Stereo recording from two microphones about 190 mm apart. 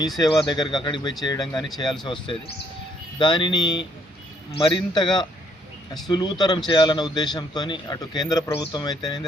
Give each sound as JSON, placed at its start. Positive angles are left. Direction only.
{"t": 0.2, "sound": "a man's voice", "side_deg": 20}